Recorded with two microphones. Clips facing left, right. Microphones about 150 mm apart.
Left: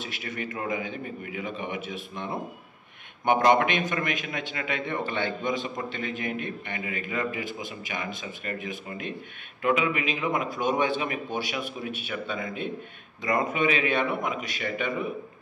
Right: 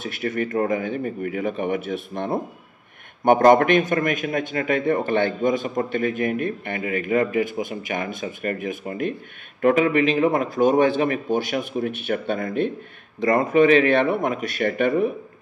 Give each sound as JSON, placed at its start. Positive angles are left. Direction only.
{"t": 0.0, "sound": "a man's voice", "side_deg": -50}